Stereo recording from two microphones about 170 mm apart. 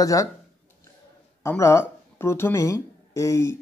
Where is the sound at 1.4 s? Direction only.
15° left (ahead or behind).